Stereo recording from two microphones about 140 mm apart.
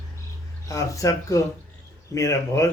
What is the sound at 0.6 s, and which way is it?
Speech, 25° left (ahead or behind).